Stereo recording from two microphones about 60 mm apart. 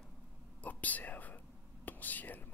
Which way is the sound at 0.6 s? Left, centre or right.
Left.